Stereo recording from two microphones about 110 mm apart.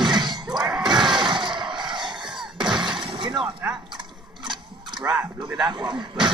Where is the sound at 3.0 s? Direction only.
45° right (ahead or behind).